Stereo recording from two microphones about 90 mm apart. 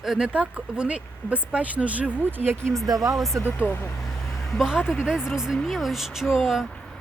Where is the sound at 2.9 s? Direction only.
40° right (ahead or behind).